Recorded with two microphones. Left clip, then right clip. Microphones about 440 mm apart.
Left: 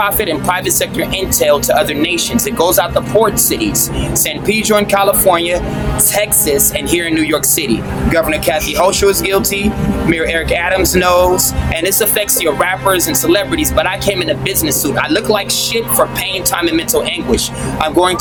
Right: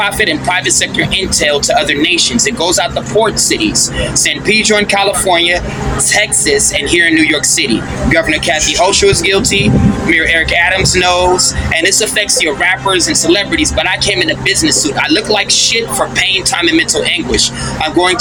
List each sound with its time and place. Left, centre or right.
0.0 s speech: left